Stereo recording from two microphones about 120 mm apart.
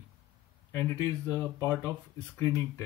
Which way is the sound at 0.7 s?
20° left (ahead or behind).